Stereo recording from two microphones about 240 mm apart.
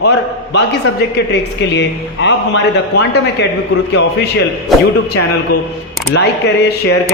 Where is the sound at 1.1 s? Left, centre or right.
Left.